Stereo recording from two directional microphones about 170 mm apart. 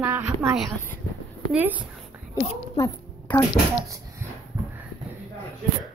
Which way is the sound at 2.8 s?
15° left (ahead or behind).